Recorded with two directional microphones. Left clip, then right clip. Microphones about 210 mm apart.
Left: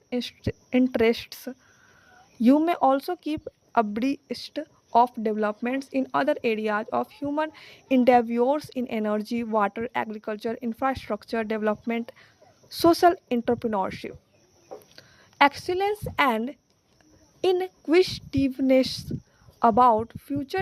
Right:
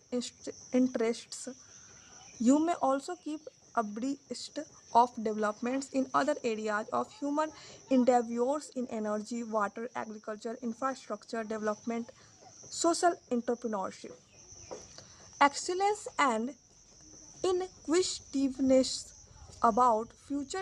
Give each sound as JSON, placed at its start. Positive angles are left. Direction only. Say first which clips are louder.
{"t": 0.1, "sound": "speech", "louder": "left 7 dB", "side_deg": 30}